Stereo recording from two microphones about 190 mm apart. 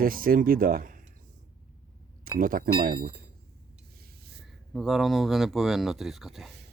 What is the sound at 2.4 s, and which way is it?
Speech, 45° right (ahead or behind).